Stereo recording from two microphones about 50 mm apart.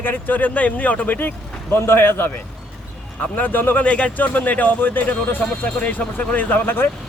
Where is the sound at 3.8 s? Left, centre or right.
Left.